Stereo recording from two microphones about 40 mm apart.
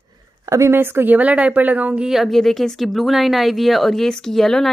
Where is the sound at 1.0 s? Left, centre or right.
Right.